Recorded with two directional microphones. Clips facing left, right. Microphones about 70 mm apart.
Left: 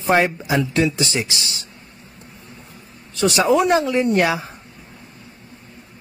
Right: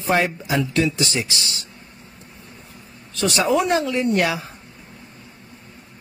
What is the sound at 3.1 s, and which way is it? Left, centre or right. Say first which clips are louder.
Speech: left 3 dB; centre.